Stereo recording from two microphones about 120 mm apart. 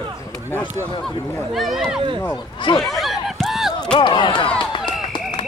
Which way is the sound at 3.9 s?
40° left (ahead or behind).